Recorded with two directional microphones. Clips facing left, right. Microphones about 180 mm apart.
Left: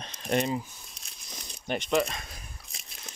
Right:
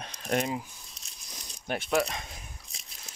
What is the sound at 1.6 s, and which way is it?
Speech, 5° right (ahead or behind).